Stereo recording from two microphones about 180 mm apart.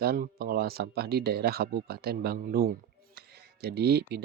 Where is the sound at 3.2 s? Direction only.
65° right (ahead or behind).